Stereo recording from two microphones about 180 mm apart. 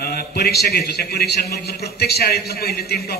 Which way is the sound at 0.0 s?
60° left (ahead or behind).